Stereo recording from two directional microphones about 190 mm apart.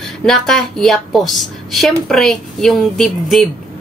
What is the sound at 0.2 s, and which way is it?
Speech, centre (ahead or behind).